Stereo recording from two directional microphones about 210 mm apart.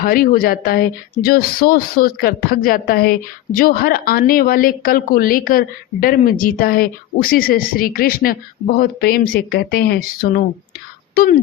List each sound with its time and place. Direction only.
0.0 s a woman's voice: 45° left (ahead or behind)